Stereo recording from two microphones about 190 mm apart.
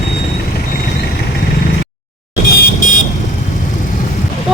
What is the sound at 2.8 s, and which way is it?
Vehicle, 45° left (ahead or behind).